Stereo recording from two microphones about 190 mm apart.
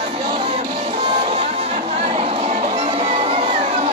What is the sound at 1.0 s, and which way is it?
Music, 30° right (ahead or behind).